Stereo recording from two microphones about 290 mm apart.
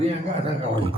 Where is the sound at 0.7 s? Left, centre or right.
Centre.